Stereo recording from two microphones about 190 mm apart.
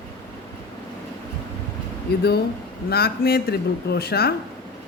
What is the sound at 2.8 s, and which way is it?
Speech, 55° left (ahead or behind).